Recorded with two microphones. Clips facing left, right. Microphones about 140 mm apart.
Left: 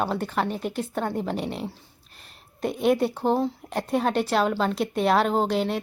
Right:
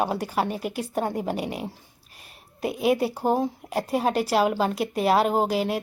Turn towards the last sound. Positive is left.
turn(degrees=-5)  # may be behind; listen again after turning